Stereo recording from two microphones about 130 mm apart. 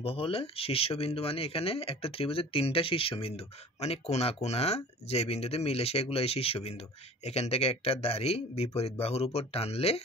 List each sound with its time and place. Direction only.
0.0 s speech: 45° left (ahead or behind)